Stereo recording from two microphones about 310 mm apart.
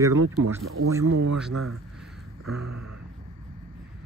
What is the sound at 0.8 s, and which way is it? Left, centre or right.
Speech, right.